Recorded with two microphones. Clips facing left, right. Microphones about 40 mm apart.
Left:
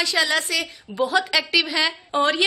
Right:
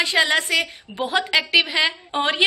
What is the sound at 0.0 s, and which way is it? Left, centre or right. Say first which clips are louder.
A woman's voice: right 2 dB; right.